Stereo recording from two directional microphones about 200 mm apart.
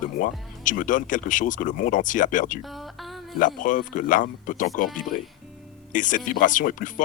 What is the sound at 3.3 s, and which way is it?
Speech, 40° left (ahead or behind).